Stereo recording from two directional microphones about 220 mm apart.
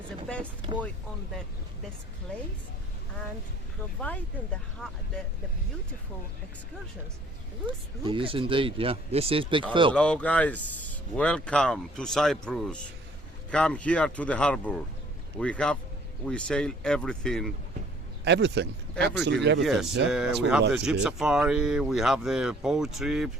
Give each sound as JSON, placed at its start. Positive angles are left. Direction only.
{"t": 0.7, "sound": "speech", "side_deg": -20}
{"t": 2.3, "sound": "speech", "side_deg": 5}
{"t": 4.8, "sound": "speech", "side_deg": 5}
{"t": 7.7, "sound": "speech", "side_deg": -25}
{"t": 9.9, "sound": "speech", "side_deg": 5}
{"t": 18.3, "sound": "speech", "side_deg": -55}
{"t": 20.1, "sound": "speech", "side_deg": -5}